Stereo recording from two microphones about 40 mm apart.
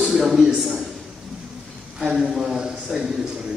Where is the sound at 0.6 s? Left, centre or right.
Centre.